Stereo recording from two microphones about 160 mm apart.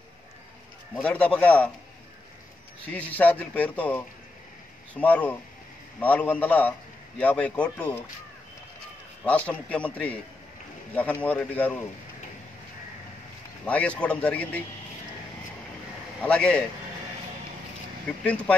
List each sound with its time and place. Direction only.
1.0 s a man's voice: 10° left (ahead or behind)
2.9 s a man's voice: 10° left (ahead or behind)
9.2 s a man's voice: 10° left (ahead or behind)
13.7 s a man's voice: 10° left (ahead or behind)
16.2 s a man's voice: 5° left (ahead or behind)